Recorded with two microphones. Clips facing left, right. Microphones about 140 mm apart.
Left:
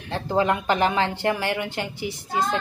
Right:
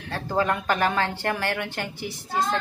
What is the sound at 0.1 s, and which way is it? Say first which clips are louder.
A woman's voice: left 3 dB; 15° left (ahead or behind).